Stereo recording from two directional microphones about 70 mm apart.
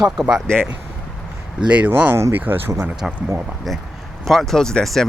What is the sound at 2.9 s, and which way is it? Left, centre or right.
Speech, centre.